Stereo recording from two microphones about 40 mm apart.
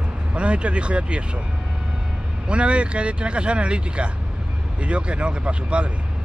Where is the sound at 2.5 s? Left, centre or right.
Right.